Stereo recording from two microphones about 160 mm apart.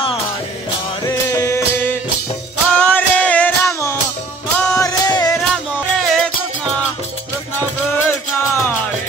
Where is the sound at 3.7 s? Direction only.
20° left (ahead or behind).